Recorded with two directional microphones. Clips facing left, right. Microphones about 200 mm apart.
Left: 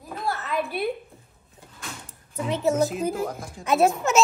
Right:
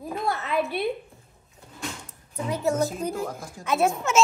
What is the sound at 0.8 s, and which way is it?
Speech, centre (ahead or behind).